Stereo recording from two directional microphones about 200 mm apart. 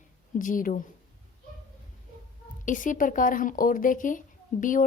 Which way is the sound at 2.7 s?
40° left (ahead or behind).